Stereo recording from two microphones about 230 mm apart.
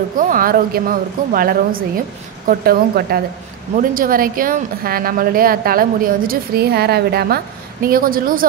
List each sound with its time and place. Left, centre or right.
0.1 s a woman's voice: right